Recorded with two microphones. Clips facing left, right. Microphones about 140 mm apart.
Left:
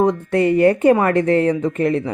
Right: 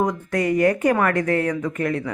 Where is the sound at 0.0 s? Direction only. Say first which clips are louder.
Left 6 dB; 30° left (ahead or behind).